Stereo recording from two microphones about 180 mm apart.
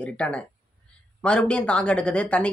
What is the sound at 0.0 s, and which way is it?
Speech, 5° left (ahead or behind).